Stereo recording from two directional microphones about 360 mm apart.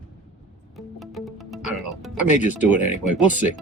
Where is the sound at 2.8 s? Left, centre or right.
Left.